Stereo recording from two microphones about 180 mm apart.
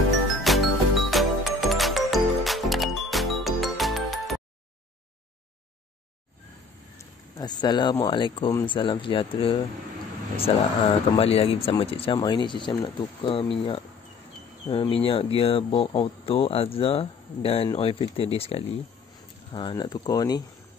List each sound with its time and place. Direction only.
0.4 s music: centre (ahead or behind)
7.3 s speech: 25° left (ahead or behind)